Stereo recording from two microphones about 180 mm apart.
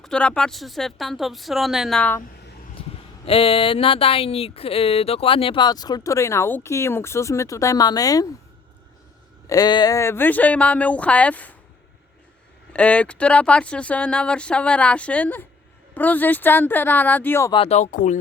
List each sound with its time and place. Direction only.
0.0 s speech: 5° left (ahead or behind)
3.2 s speech: 30° left (ahead or behind)
9.5 s speech: 20° left (ahead or behind)
12.7 s speech: 5° left (ahead or behind)
17.5 s speech: 35° left (ahead or behind)